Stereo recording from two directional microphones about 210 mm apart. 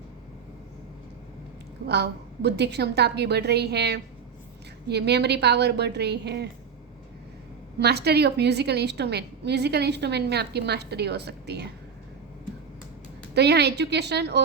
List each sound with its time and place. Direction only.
1.9 s a woman's voice: 50° right (ahead or behind)
7.8 s a woman's voice: 50° right (ahead or behind)
13.3 s a woman's voice: 50° right (ahead or behind)